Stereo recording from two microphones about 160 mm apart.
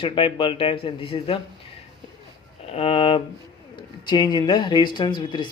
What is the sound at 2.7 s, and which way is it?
A man's voice, 35° left (ahead or behind).